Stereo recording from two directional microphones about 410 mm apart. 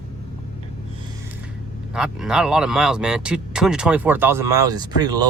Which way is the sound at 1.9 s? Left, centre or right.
Centre.